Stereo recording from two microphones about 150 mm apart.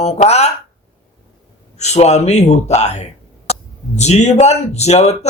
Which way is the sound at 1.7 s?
50° left (ahead or behind).